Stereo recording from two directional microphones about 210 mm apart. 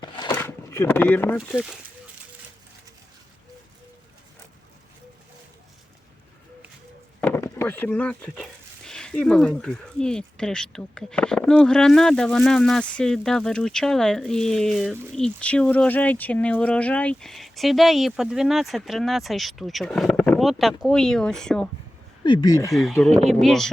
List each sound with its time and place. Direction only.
0.0 s a sound: 20° left (ahead or behind)
1.4 s speech: 5° right (ahead or behind)
7.2 s speech: 10° left (ahead or behind)
22.2 s speech: 20° left (ahead or behind)
22.7 s speech: centre (ahead or behind)